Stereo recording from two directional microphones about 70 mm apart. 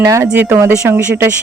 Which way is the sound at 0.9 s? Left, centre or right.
Right.